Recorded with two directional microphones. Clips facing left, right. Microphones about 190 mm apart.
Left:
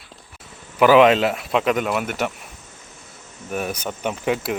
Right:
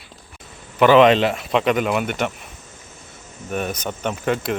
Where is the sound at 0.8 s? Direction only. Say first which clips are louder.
Right 1 dB; 5° left (ahead or behind).